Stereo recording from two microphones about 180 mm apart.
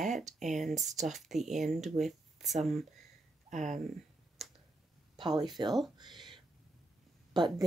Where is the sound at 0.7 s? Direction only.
40° right (ahead or behind).